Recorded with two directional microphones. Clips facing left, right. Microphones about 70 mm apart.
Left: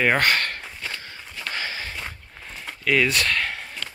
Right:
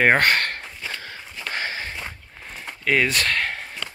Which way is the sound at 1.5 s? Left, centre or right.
Right.